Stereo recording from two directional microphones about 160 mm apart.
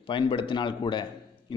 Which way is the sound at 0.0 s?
30° left (ahead or behind).